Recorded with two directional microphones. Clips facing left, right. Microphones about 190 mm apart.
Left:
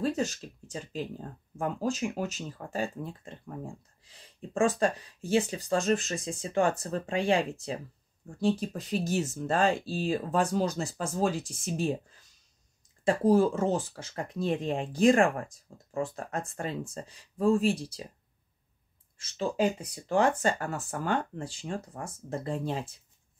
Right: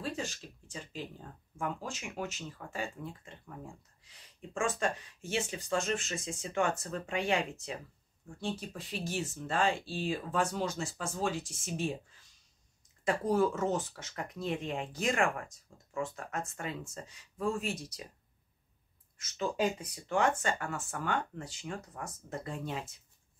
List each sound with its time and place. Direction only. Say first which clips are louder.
0.0 s speech: left 8 dB; 40° left (ahead or behind)
13.0 s speech: left 6 dB; 30° left (ahead or behind)
19.1 s speech: left 4 dB; 30° left (ahead or behind)